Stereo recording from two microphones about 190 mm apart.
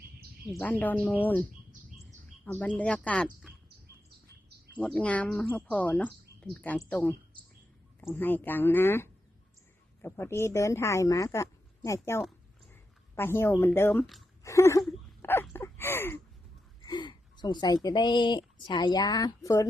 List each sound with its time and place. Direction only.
0.6 s speech: 10° left (ahead or behind)
4.9 s speech: 5° left (ahead or behind)
13.1 s speech: 10° left (ahead or behind)
14.4 s a sound: 15° left (ahead or behind)
16.8 s a sound: 25° left (ahead or behind)
17.8 s a woman's voice: 25° left (ahead or behind)